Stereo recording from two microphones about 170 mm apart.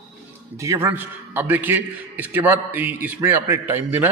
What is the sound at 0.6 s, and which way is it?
Speech, 15° right (ahead or behind).